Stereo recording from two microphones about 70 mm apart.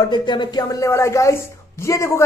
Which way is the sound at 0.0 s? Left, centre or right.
Left.